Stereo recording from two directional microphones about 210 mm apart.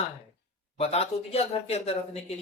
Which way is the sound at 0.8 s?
30° left (ahead or behind).